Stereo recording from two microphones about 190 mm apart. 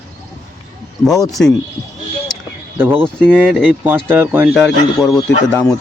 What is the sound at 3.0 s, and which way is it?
Speech, 5° left (ahead or behind).